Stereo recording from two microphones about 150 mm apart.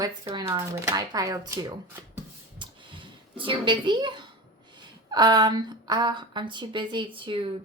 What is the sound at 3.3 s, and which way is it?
A woman's voice, 35° right (ahead or behind).